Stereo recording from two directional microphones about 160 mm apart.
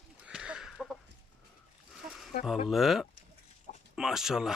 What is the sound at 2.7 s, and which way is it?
Speech, centre (ahead or behind).